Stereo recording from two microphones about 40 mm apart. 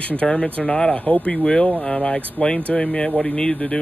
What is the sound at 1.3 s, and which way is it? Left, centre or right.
Speech, left.